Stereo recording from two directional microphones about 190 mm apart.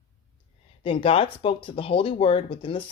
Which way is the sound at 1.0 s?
30° left (ahead or behind).